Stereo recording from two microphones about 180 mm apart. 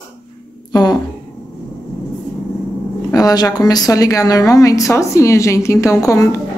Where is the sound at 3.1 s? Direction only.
20° left (ahead or behind).